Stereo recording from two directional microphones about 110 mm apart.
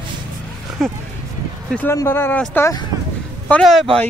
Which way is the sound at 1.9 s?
25° left (ahead or behind).